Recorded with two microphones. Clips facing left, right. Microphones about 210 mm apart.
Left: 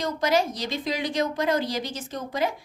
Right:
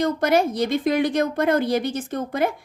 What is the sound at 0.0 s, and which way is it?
A woman's voice, 55° right (ahead or behind).